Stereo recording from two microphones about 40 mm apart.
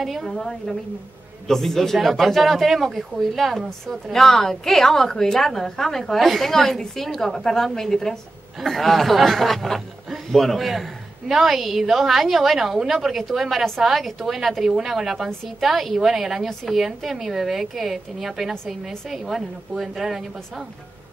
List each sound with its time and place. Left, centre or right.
0.0 s a woman's voice: centre
3.9 s a woman's voice: centre